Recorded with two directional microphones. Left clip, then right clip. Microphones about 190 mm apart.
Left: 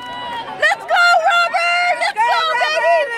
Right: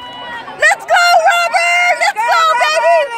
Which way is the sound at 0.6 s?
50° right (ahead or behind).